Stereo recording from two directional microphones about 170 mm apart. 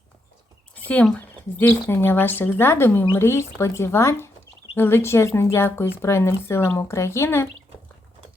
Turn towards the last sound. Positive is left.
turn(degrees=15)  # may be behind; listen again after turning